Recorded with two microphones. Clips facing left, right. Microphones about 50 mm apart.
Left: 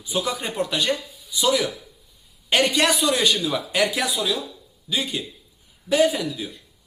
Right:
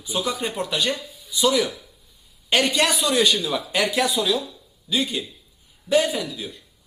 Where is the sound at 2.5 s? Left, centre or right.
Left.